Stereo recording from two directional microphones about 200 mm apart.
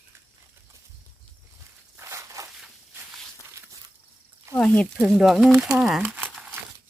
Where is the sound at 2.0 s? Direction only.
15° right (ahead or behind).